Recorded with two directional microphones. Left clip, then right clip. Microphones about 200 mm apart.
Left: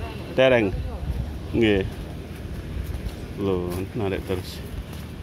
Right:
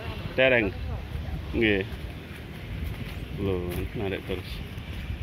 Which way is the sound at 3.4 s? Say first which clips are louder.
Left 5 dB; 10° left (ahead or behind).